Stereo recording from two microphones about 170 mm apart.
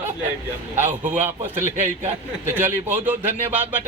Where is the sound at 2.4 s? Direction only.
10° right (ahead or behind).